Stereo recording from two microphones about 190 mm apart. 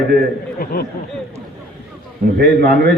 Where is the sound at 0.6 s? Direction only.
55° left (ahead or behind).